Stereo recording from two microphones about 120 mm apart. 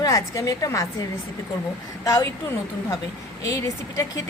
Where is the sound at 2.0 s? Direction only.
25° left (ahead or behind).